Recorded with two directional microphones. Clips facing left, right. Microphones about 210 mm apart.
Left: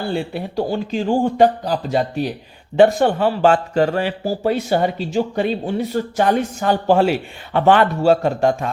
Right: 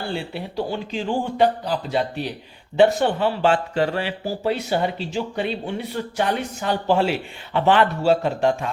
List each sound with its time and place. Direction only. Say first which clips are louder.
0.1 s speech: left 5 dB; 45° left (ahead or behind)